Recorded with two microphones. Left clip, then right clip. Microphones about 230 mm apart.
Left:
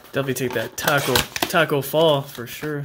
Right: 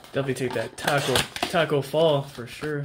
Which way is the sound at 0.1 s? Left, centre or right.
Centre.